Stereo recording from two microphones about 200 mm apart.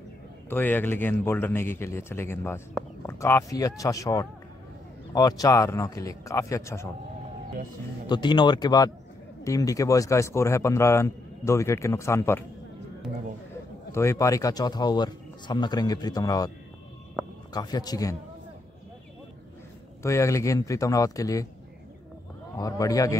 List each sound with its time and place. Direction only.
0.5 s speech: 10° left (ahead or behind)
8.1 s speech: 20° left (ahead or behind)
13.9 s speech: 15° left (ahead or behind)
20.0 s speech: 15° left (ahead or behind)
22.6 s speech: 15° left (ahead or behind)